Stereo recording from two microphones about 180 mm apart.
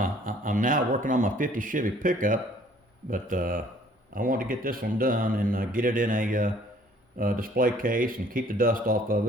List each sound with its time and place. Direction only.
0.0 s speech: 45° right (ahead or behind)